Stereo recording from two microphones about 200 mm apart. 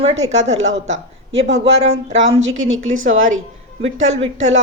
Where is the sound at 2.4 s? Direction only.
80° right.